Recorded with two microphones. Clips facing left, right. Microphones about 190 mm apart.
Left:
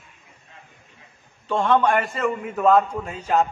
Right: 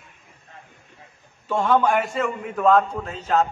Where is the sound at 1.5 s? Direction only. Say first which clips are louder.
Even; centre (ahead or behind).